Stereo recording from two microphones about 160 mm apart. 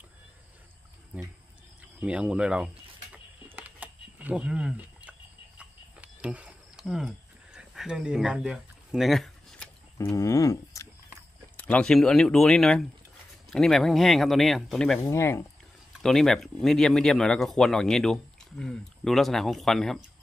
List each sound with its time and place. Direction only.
1.8 s bird: 10° right (ahead or behind)
3.5 s a sound: 10° right (ahead or behind)
9.9 s a sound: 20° left (ahead or behind)
11.6 s speech: 5° left (ahead or behind)
15.0 s speech: 20° left (ahead or behind)
16.0 s speech: 5° left (ahead or behind)